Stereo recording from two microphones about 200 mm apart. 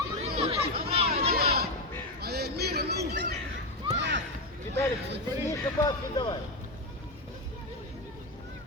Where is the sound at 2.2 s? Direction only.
55° right (ahead or behind).